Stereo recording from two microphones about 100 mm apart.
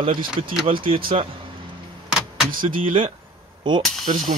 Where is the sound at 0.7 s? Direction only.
65° right (ahead or behind).